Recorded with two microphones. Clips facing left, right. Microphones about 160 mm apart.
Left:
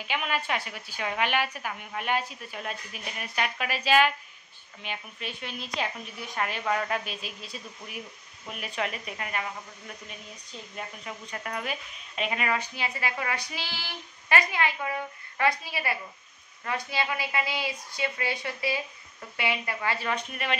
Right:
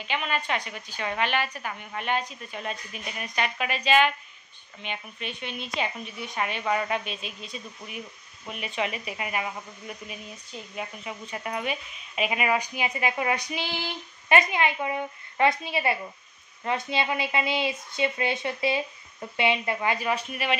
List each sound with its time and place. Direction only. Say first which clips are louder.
0.0 s a woman's voice: right 1 dB; 5° left (ahead or behind)